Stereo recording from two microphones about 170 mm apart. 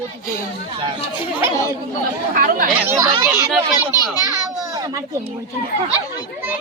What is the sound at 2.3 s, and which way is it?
Speech, 55° right (ahead or behind).